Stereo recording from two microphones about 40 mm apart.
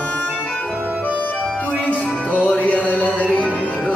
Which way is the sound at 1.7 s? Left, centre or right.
Left.